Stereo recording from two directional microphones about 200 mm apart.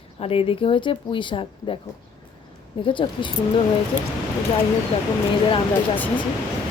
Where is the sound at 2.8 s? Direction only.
25° left (ahead or behind).